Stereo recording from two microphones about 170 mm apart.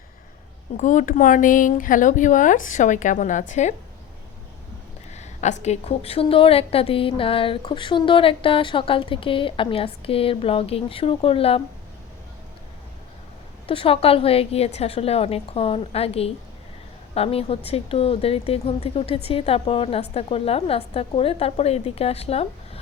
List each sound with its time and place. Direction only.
0.8 s speech: 50° left (ahead or behind)
5.1 s a woman's voice: 45° left (ahead or behind)
13.7 s a woman's voice: 35° left (ahead or behind)